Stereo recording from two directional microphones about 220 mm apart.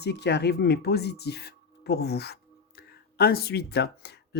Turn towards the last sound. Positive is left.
turn(degrees=50)  # may be behind; listen again after turning